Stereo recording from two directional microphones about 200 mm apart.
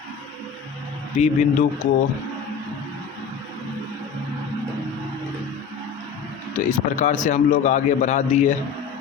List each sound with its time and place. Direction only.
1.1 s speech: 35° left (ahead or behind)
6.5 s speech: 40° left (ahead or behind)